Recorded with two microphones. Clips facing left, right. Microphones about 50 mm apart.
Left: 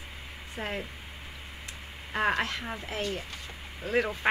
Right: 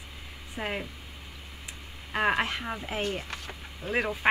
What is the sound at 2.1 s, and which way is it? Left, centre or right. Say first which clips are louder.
Speech: right 1 dB; centre.